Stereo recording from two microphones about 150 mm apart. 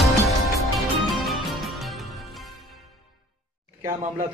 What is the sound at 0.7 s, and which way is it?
Music, centre (ahead or behind).